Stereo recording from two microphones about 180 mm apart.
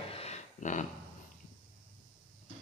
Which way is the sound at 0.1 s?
35° left (ahead or behind).